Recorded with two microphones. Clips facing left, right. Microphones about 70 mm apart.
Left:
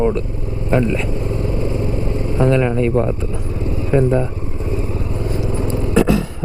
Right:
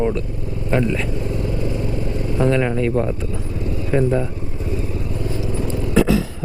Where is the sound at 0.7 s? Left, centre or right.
Left.